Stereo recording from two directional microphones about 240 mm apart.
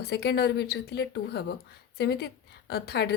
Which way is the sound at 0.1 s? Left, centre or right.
Left.